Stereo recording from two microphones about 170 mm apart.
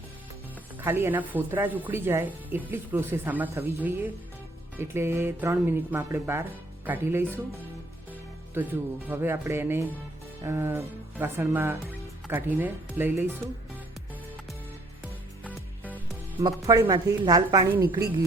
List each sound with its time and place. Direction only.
0.8 s speech: 15° right (ahead or behind)
8.6 s speech: 15° right (ahead or behind)
15.4 s music: 10° left (ahead or behind)
16.4 s a woman's voice: 20° right (ahead or behind)